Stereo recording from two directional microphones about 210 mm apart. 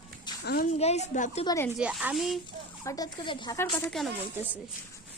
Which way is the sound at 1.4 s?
15° left (ahead or behind).